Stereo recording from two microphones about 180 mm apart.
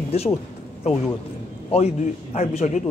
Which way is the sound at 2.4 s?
40° left (ahead or behind).